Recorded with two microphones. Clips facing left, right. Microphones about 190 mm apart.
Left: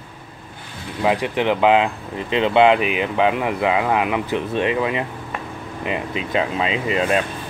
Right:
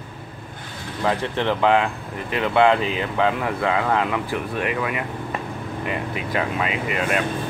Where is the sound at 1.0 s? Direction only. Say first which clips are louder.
Left 3 dB; 15° left (ahead or behind).